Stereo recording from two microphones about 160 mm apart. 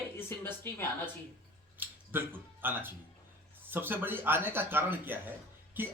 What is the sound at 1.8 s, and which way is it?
Speech, 15° right (ahead or behind).